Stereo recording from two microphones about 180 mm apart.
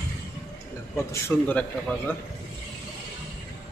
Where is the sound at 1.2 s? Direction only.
10° left (ahead or behind).